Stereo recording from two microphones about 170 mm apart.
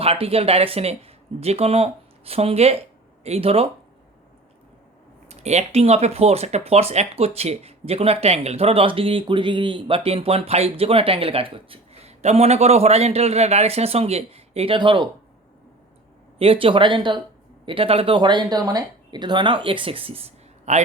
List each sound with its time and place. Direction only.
0.0 s speech: 35° right (ahead or behind)
5.3 s speech: 40° right (ahead or behind)
16.4 s speech: 30° right (ahead or behind)